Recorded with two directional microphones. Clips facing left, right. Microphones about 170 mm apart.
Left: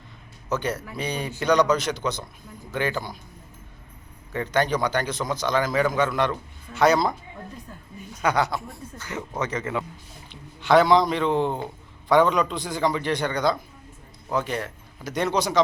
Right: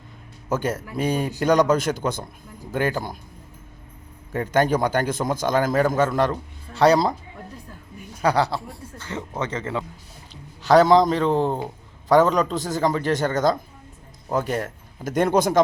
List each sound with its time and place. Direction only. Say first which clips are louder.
0.5 s a man's voice: right 3 dB; 45° right (ahead or behind)
4.3 s a man's voice: right 3 dB; 50° right (ahead or behind)
8.2 s a man's voice: right 3 dB; 35° right (ahead or behind)
10.6 s a man's voice: right 3 dB; 40° right (ahead or behind)